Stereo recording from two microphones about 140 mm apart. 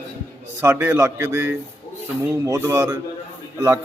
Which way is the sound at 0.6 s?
15° right (ahead or behind).